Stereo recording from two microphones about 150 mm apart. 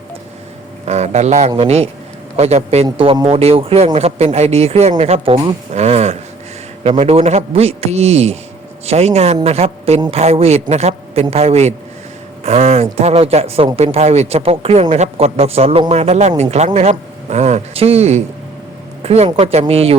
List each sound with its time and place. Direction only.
0.9 s speech: 45° right (ahead or behind)
5.7 s speech: 45° right (ahead or behind)